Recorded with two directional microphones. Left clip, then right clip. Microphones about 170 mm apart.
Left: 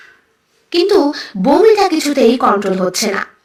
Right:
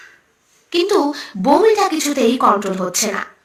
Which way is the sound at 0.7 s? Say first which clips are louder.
Left 4 dB; 20° left (ahead or behind).